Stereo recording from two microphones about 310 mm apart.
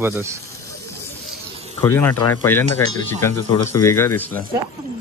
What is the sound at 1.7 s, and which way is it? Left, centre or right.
Speech, centre.